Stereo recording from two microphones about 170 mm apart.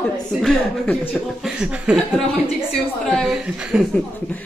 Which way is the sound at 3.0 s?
Centre (ahead or behind).